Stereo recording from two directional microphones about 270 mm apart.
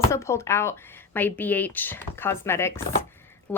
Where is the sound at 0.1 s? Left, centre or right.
Centre.